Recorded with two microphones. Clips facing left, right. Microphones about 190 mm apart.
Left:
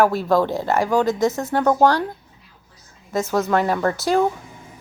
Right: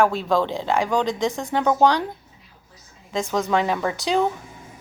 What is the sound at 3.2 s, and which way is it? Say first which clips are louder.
Speech: left 2 dB; 5° left (ahead or behind).